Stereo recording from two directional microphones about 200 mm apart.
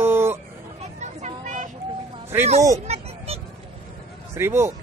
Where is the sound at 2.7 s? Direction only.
30° right (ahead or behind).